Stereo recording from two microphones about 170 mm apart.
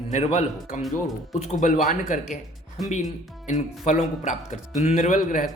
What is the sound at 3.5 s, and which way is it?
Speech, 45° left (ahead or behind).